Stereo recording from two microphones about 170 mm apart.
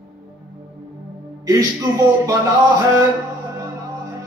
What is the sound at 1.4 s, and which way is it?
Speech, 20° right (ahead or behind).